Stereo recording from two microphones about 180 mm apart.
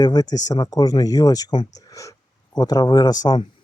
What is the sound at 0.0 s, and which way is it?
Speech, 20° left (ahead or behind).